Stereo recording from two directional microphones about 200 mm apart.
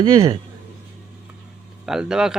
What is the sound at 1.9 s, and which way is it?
Speech, 5° right (ahead or behind).